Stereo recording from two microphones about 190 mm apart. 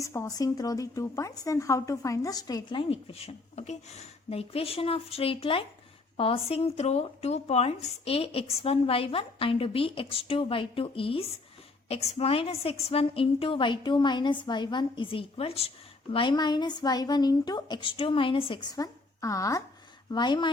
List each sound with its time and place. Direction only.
0.0 s speech: 15° left (ahead or behind)